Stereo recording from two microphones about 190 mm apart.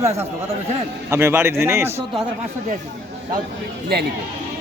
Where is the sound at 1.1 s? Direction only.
15° right (ahead or behind).